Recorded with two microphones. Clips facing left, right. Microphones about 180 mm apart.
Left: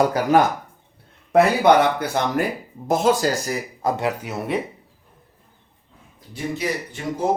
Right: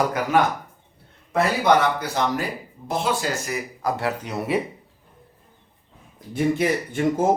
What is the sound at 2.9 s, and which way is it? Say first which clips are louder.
Speech: left 6 dB; 45° left (ahead or behind).